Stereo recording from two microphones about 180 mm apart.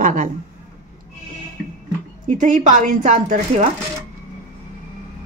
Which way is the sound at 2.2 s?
45° right (ahead or behind).